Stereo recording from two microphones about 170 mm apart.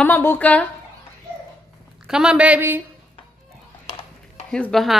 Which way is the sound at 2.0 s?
5° right (ahead or behind).